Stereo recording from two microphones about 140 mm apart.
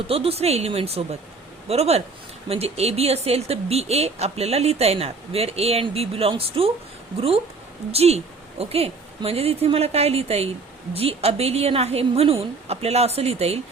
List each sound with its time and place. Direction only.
0.1 s speech: 45° right (ahead or behind)
7.9 s speech: 45° right (ahead or behind)